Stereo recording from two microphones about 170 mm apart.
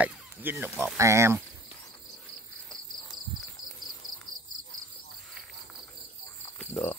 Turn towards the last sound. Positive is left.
turn(degrees=10)  # may be behind; listen again after turning